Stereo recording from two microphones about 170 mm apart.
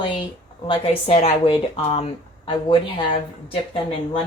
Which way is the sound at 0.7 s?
35° left (ahead or behind).